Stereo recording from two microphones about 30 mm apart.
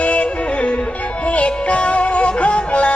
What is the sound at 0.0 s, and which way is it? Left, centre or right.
Music, left.